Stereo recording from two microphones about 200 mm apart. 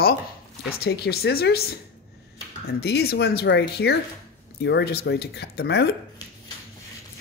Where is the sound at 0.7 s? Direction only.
55° left (ahead or behind).